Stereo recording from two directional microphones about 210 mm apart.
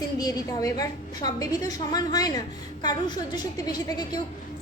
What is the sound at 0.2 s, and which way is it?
A woman's voice, 20° left (ahead or behind).